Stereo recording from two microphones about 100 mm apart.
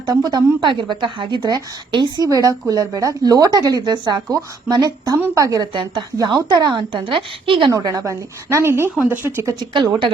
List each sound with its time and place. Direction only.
0.0 s a woman's voice: 45° right (ahead or behind)
2.3 s speech: 35° right (ahead or behind)
5.7 s a woman's voice: 55° right (ahead or behind)
7.7 s speech: 40° right (ahead or behind); by 9.5 s 20° right (ahead or behind)
9.6 s a woman's voice: 50° right (ahead or behind)